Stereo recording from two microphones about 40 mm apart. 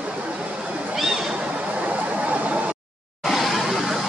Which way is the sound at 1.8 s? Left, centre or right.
Right.